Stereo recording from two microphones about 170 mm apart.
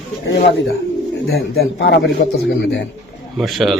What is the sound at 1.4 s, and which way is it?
A man's voice, 75° left (ahead or behind).